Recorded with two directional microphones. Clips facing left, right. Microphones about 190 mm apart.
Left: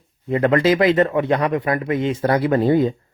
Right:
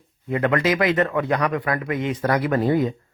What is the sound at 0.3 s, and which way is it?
Speech, 30° left (ahead or behind).